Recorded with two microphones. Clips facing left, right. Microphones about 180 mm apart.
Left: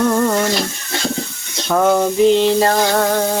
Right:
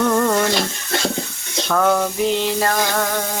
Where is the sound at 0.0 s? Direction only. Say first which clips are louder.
Left 2 dB; 10° left (ahead or behind).